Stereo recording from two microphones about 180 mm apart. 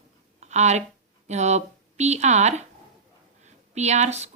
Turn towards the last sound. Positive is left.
turn(degrees=-40)  # may be behind; listen again after turning